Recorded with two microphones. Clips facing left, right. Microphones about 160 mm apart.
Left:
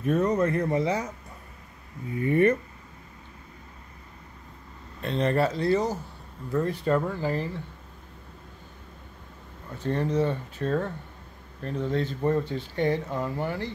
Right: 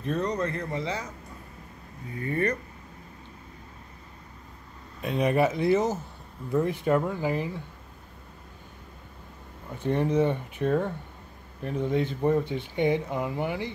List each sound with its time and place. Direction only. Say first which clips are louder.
0.0 s speech: left 5 dB; 5° left (ahead or behind)
0.7 s speech: left 6 dB; 25° left (ahead or behind)
2.1 s speech: left 6 dB; 20° left (ahead or behind)
5.0 s speech: right 1 dB; 10° right (ahead or behind)
9.7 s speech: right 2 dB; 15° right (ahead or behind)